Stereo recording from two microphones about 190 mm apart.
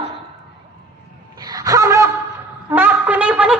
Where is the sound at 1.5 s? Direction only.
20° right (ahead or behind).